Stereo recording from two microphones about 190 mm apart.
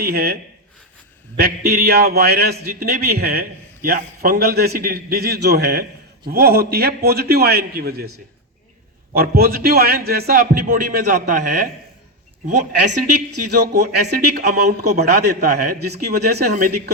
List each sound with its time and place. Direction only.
0.0 s a man's voice: 55° right (ahead or behind)
1.4 s a man's voice: 55° right (ahead or behind)
9.1 s a man's voice: 55° right (ahead or behind)
13.5 s a man's voice: 60° right (ahead or behind)
16.5 s a man's voice: 45° right (ahead or behind)